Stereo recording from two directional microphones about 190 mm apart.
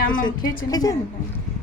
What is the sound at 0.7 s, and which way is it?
Speech, 20° left (ahead or behind).